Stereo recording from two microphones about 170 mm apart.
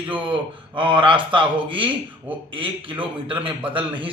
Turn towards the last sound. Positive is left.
turn(degrees=-30)  # may be behind; listen again after turning